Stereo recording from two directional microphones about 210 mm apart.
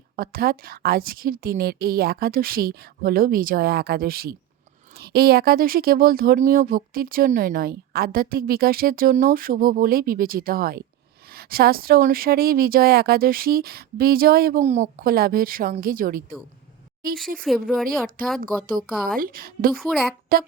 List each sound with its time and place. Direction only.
0.2 s speech: 45° right (ahead or behind)
17.4 s speech: centre (ahead or behind)
18.2 s speech: 40° right (ahead or behind)
19.7 s speech: 5° left (ahead or behind)
20.3 s speech: 45° right (ahead or behind)